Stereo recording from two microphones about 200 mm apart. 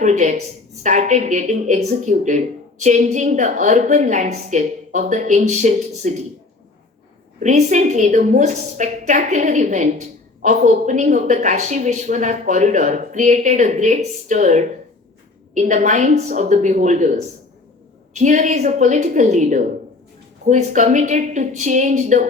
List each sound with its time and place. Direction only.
0.0 s a woman's voice: 35° right (ahead or behind)
7.3 s a woman's voice: 35° right (ahead or behind)